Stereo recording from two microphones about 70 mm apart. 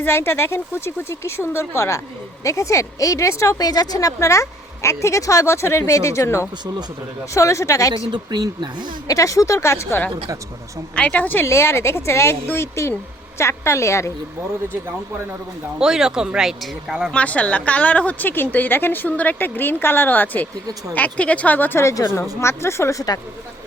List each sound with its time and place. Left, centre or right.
0.0 s speech: left
3.6 s speech: left
8.1 s speech: right
9.0 s speech: left
10.9 s a woman's voice: left
11.4 s speech: left
15.8 s speech: centre
17.1 s a woman's voice: centre
21.8 s speech: left
23.0 s speech: left